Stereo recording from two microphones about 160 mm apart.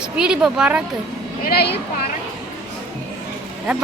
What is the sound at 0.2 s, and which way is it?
Speech, 5° right (ahead or behind).